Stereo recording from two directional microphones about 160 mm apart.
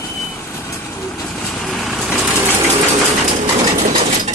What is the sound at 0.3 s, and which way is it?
Vehicle, 15° left (ahead or behind).